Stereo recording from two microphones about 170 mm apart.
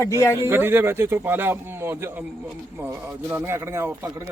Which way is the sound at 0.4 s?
15° right (ahead or behind).